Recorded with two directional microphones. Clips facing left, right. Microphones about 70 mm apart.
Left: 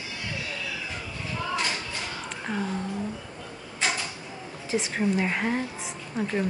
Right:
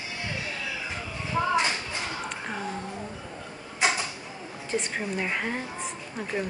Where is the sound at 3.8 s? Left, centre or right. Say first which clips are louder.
Right 3 dB; right.